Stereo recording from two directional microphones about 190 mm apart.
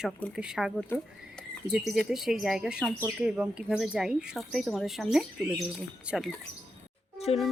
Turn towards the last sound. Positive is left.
turn(degrees=35)  # may be behind; listen again after turning